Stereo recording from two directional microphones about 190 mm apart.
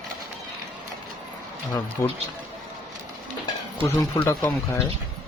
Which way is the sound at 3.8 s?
15° left (ahead or behind).